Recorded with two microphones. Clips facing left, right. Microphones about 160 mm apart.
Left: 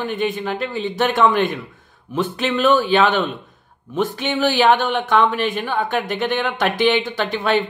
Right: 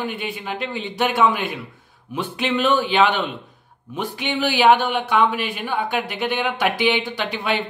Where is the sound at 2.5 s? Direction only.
40° left (ahead or behind).